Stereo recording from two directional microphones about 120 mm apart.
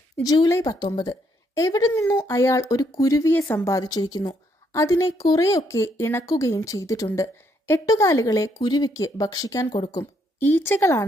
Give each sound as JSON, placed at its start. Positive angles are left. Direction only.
{"t": 0.2, "sound": "speech", "side_deg": 30}
{"t": 4.7, "sound": "speech", "side_deg": 25}
{"t": 10.0, "sound": "a woman's voice", "side_deg": 15}